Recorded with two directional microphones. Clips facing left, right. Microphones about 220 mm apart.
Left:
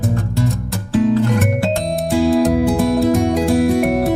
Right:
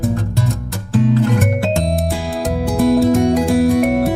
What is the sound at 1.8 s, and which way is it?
Music, centre (ahead or behind).